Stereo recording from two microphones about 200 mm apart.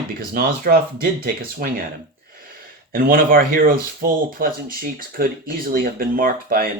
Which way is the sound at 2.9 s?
45° right (ahead or behind).